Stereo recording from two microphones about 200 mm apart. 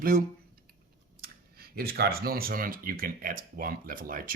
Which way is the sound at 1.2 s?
50° right (ahead or behind).